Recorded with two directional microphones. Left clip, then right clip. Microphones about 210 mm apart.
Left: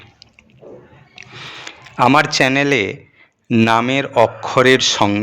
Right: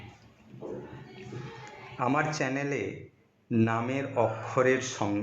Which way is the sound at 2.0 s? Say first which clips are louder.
Left 16 dB; 35° left (ahead or behind).